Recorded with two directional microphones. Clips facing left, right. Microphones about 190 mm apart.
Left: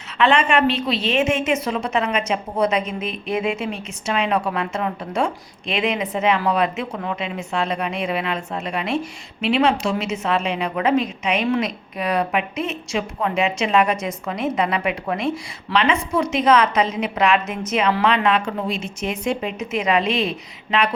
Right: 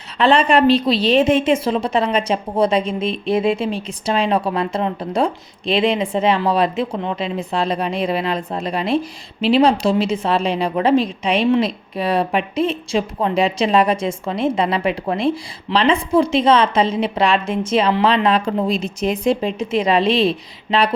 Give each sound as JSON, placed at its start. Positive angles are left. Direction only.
{"t": 0.2, "sound": "a woman's voice", "side_deg": -35}